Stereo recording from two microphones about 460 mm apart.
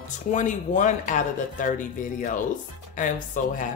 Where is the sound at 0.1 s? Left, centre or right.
Centre.